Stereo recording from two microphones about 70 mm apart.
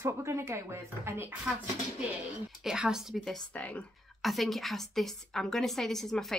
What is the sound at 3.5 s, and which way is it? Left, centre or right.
Speech, centre.